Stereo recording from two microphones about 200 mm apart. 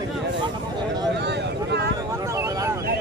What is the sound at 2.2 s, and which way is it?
Vehicle, 15° right (ahead or behind).